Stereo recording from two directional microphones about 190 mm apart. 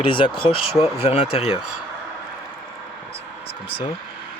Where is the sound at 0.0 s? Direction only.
25° left (ahead or behind).